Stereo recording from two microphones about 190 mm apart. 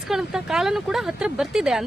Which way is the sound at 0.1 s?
5° right (ahead or behind).